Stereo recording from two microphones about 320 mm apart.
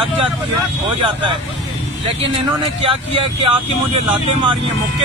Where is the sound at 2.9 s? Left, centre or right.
Centre.